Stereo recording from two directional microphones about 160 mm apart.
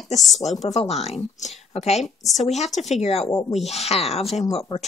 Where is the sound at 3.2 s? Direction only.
20° left (ahead or behind).